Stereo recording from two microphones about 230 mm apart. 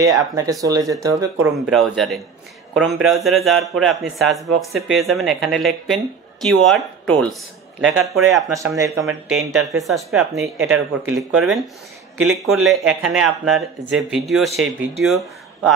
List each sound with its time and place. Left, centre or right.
0.2 s speech: centre
1.7 s speech: centre
8.5 s speech: centre
9.3 s speech: centre